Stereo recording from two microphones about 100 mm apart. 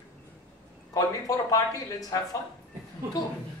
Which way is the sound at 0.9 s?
35° left (ahead or behind).